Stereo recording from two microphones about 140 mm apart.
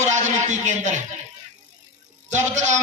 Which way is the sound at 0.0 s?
55° right (ahead or behind).